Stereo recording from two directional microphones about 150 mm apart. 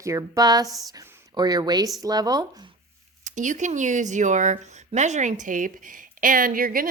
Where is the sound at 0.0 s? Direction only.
20° right (ahead or behind).